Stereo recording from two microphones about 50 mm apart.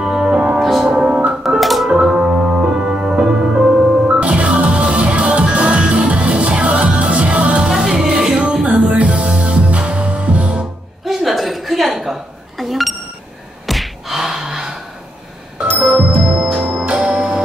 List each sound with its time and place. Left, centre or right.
0.0 s music: centre
0.6 s music: centre
1.4 s music: centre
1.9 s music: centre
7.7 s music: centre
11.1 s a sound: centre
13.7 s gasp: centre
16.8 s music: right